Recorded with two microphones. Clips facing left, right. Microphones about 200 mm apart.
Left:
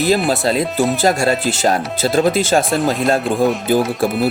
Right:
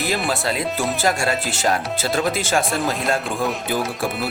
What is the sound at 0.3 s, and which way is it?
Speech, 35° left (ahead or behind).